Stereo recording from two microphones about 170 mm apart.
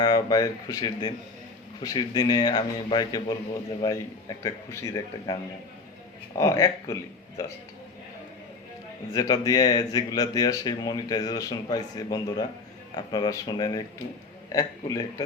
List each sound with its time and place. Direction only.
0.0 s speech: 20° left (ahead or behind)
9.1 s speech: 20° left (ahead or behind)